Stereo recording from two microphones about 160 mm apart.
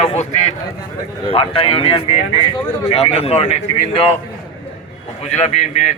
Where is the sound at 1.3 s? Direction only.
35° left (ahead or behind).